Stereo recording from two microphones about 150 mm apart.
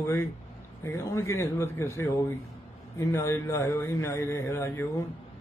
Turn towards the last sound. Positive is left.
turn(degrees=15)  # may be behind; listen again after turning